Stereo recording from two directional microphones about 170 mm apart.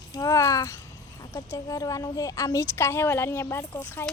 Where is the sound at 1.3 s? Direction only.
20° left (ahead or behind).